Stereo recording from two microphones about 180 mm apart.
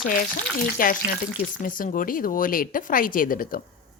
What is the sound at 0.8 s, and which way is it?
A woman's voice, 50° left (ahead or behind).